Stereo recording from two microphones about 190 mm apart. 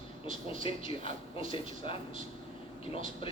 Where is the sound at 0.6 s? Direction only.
30° left (ahead or behind).